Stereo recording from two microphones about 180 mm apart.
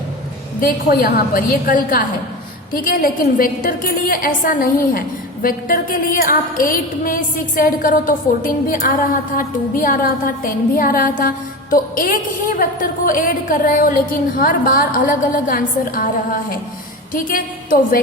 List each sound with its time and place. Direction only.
0.6 s music: 55° left (ahead or behind)
17.1 s music: 50° left (ahead or behind)